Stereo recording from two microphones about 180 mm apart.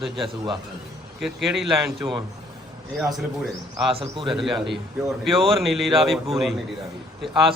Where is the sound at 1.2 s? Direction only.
Centre (ahead or behind).